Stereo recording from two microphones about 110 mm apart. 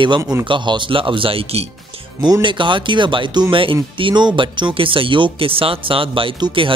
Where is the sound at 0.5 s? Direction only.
45° right (ahead or behind); by 1.7 s 60° right (ahead or behind).